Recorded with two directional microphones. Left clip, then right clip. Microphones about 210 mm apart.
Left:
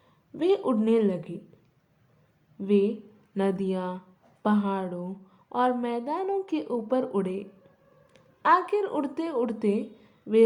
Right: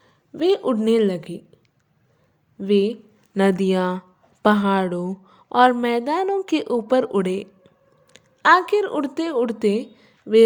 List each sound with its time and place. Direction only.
0.0 s speech: 25° right (ahead or behind)
2.6 s a woman's voice: 30° right (ahead or behind)